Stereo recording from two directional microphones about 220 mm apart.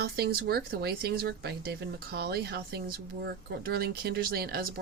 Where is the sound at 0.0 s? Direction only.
45° right (ahead or behind).